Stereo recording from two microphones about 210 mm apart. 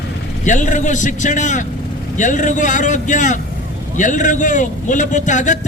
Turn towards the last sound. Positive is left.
turn(degrees=35)  # may be behind; listen again after turning